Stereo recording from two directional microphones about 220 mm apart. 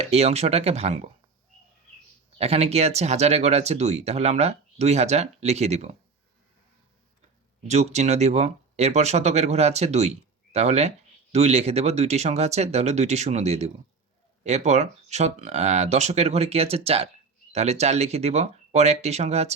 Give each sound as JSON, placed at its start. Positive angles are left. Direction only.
{"t": 0.0, "sound": "speech", "side_deg": -30}
{"t": 2.4, "sound": "speech", "side_deg": -30}
{"t": 7.7, "sound": "speech", "side_deg": -30}